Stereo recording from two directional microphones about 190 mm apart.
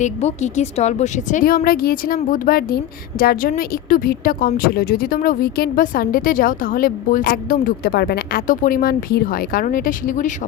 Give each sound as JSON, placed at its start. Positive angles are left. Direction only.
{"t": 0.0, "sound": "a woman's voice", "side_deg": 35}